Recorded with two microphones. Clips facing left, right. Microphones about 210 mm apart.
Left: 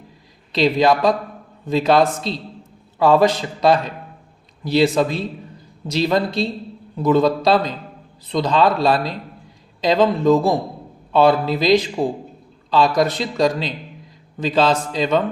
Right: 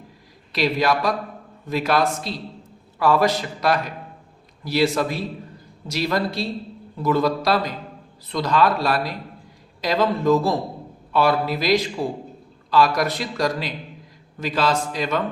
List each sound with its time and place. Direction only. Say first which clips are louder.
0.5 s a man's voice: left 5 dB; 20° left (ahead or behind)